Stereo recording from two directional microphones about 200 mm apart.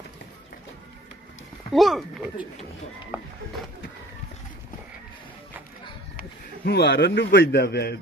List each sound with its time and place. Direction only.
1.7 s speech: centre (ahead or behind)
6.1 s a man's voice: 50° left (ahead or behind)